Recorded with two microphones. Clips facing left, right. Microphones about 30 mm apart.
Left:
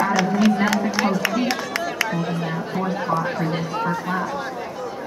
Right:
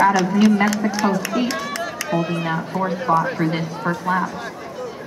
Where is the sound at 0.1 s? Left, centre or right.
Centre.